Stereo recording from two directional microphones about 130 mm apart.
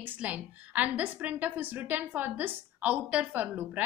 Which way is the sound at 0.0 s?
10° right (ahead or behind).